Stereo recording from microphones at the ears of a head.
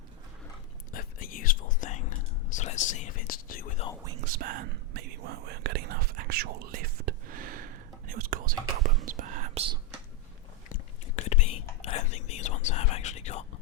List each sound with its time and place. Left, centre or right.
0.9 s whispering: left
4.0 s whispering: right
11.2 s whispering: left